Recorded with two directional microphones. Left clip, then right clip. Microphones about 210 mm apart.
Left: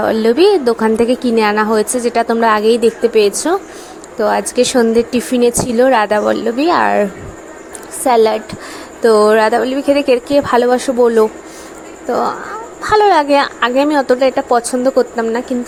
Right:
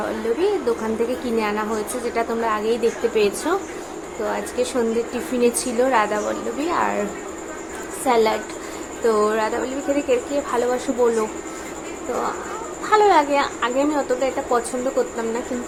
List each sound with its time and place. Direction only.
0.0 s a woman's voice: 40° left (ahead or behind)
8.0 s a woman's voice: 35° left (ahead or behind)
12.8 s a woman's voice: 35° left (ahead or behind)